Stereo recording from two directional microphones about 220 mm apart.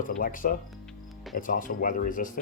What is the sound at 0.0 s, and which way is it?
Speech, 35° left (ahead or behind).